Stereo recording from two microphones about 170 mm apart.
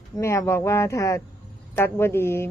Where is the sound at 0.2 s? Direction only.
15° left (ahead or behind).